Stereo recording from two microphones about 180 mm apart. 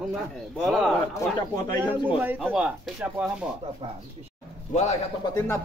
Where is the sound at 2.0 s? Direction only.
10° right (ahead or behind).